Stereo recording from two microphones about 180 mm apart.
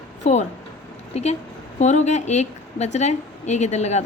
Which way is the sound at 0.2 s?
40° left (ahead or behind).